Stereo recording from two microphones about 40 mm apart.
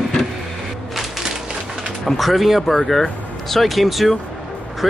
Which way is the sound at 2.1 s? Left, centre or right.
Centre.